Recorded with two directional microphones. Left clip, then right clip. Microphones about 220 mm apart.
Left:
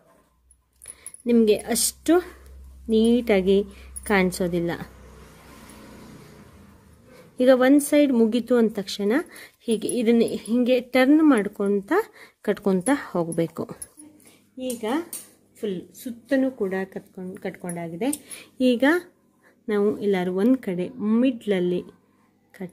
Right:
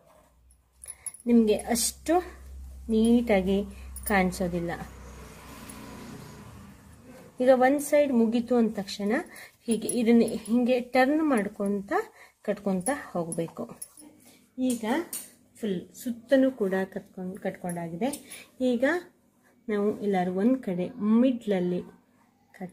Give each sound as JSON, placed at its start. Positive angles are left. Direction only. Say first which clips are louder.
{"t": 1.2, "sound": "a woman's voice", "louder": "left 4 dB", "side_deg": 40}
{"t": 7.3, "sound": "a woman's voice", "louder": "left 4 dB", "side_deg": 45}
{"t": 15.6, "sound": "speech", "louder": "left 3 dB", "side_deg": 35}